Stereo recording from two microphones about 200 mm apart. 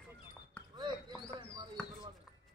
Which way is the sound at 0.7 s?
20° right (ahead or behind).